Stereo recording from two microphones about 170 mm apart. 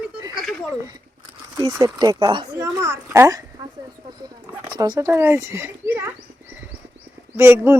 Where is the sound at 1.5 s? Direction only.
25° right (ahead or behind).